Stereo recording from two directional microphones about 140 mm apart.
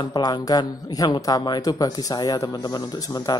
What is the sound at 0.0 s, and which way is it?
Speech, 30° left (ahead or behind).